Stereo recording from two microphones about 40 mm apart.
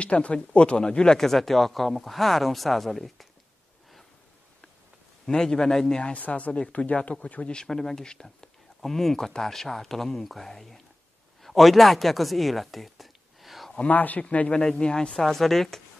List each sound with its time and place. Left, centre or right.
0.0 s speech: left
1.2 s speech: centre
5.2 s speech: centre
6.1 s speech: left
7.6 s speech: centre
13.8 s speech: left
14.7 s speech: centre
15.1 s speech: centre